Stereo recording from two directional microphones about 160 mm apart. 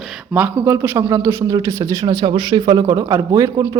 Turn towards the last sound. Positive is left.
turn(degrees=-20)  # may be behind; listen again after turning